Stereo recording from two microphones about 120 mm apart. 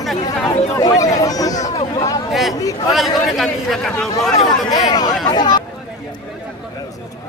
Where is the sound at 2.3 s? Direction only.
Centre (ahead or behind).